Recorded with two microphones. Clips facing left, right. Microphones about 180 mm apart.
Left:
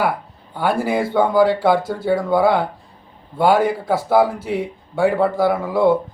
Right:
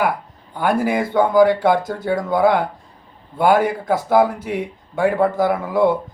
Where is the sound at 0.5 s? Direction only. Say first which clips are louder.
Right 1 dB; 10° left (ahead or behind).